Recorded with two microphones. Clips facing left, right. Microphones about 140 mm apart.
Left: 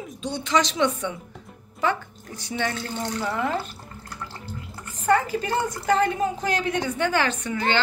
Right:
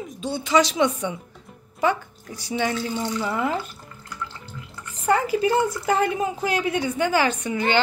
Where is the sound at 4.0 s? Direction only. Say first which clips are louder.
Right 3 dB; 35° left (ahead or behind).